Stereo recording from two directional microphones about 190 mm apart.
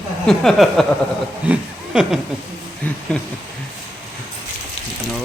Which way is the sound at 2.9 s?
5° left (ahead or behind).